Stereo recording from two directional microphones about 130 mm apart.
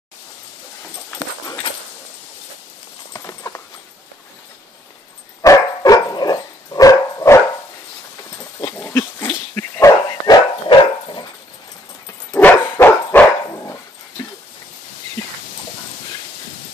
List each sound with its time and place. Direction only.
3.1 s clip-clop: 25° left (ahead or behind)
5.4 s dog: 25° left (ahead or behind)
8.8 s dog: 15° left (ahead or behind); by 11.2 s 35° left (ahead or behind)
12.3 s dog: 10° left (ahead or behind)